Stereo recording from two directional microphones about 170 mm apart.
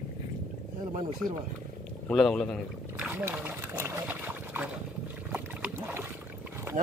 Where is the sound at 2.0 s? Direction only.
5° left (ahead or behind).